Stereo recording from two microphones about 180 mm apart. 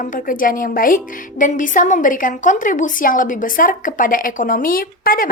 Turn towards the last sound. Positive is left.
turn(degrees=50)  # may be behind; listen again after turning